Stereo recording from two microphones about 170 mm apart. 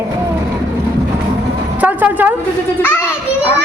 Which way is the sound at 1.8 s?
10° right (ahead or behind).